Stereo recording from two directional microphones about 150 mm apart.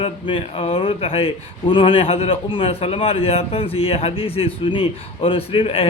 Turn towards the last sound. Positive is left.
turn(degrees=40)  # may be behind; listen again after turning